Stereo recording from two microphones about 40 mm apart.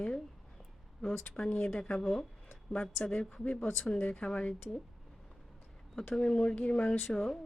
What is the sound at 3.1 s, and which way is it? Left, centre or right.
Speech, left.